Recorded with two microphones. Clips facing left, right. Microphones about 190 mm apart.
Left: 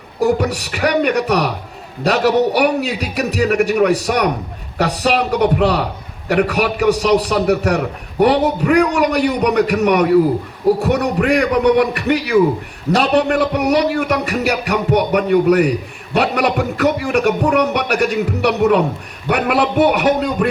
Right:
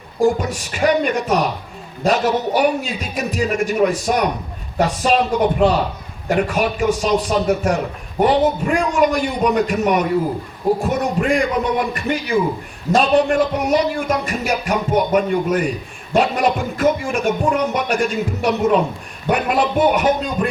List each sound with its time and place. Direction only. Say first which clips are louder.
0.3 s a man's voice: left 3 dB; 70° left (ahead or behind)